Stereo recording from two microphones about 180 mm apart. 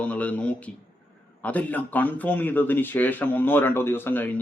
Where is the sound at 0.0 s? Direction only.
5° left (ahead or behind).